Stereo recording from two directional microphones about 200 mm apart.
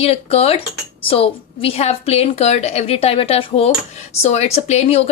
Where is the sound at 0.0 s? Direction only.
30° left (ahead or behind).